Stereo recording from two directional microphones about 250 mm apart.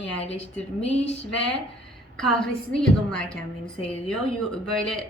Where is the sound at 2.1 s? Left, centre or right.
Centre.